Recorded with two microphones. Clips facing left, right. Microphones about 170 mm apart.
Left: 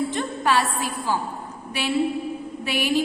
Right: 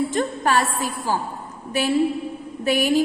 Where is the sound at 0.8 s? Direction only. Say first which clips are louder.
Right 1 dB; 45° right (ahead or behind).